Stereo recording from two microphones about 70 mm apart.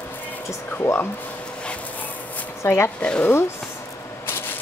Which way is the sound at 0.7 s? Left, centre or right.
Left.